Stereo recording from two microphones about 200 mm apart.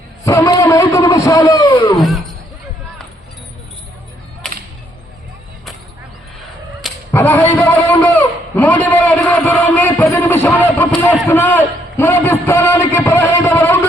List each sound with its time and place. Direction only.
0.3 s a man's voice: 15° left (ahead or behind)
2.0 s speech: centre (ahead or behind)
7.1 s a sound: 10° left (ahead or behind)